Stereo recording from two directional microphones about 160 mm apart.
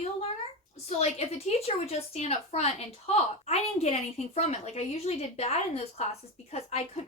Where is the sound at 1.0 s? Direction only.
40° left (ahead or behind).